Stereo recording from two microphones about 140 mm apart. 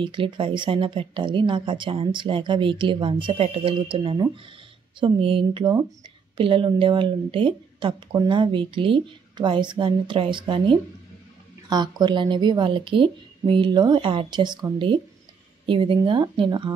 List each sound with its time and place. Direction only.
0.0 s speech: 35° right (ahead or behind)